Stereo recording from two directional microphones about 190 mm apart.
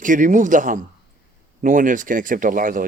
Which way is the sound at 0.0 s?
45° right (ahead or behind).